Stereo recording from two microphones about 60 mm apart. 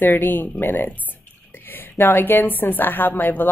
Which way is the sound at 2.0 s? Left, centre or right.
Left.